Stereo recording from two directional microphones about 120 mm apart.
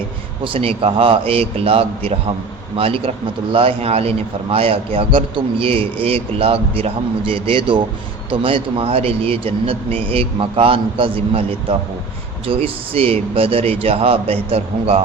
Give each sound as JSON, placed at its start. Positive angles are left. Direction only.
{"t": 0.4, "sound": "a man's voice", "side_deg": -50}
{"t": 12.5, "sound": "a man's voice", "side_deg": -50}